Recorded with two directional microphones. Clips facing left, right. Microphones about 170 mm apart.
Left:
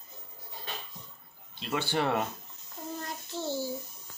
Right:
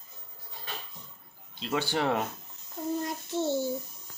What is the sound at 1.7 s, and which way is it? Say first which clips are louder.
Speech: right 2 dB; 15° right (ahead or behind).